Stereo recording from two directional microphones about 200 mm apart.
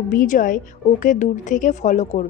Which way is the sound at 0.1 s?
45° left (ahead or behind).